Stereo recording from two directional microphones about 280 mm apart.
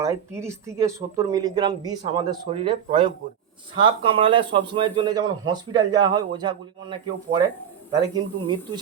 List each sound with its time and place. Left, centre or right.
0.0 s speech: centre